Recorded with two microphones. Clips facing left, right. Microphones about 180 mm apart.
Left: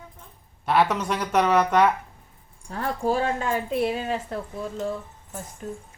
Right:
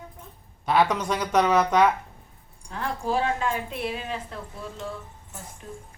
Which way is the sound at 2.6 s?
40° left (ahead or behind).